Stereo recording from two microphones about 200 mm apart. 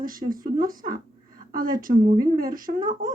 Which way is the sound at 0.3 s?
45° right (ahead or behind).